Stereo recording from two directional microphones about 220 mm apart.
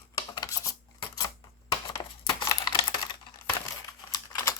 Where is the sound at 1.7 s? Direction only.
20° left (ahead or behind).